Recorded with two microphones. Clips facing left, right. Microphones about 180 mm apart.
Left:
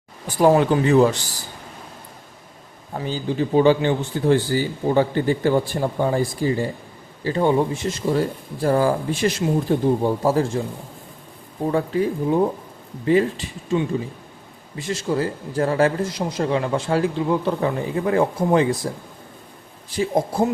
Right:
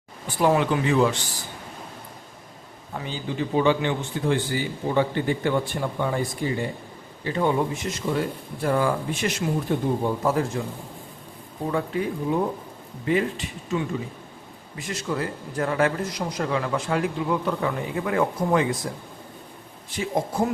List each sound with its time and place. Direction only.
0.3 s a man's voice: 40° left (ahead or behind)
2.9 s a man's voice: 35° left (ahead or behind)
11.7 s a man's voice: 35° left (ahead or behind)
20.0 s a man's voice: 35° left (ahead or behind)